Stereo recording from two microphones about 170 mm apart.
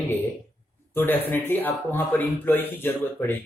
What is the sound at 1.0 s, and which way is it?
A man's voice, 10° left (ahead or behind).